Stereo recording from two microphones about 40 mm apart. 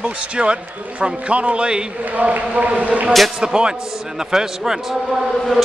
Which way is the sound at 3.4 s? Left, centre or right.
Centre.